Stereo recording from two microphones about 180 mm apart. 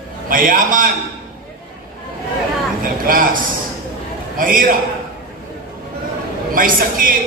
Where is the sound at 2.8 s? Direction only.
50° right (ahead or behind).